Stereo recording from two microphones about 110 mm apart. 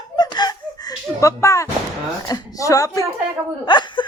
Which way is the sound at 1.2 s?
30° left (ahead or behind).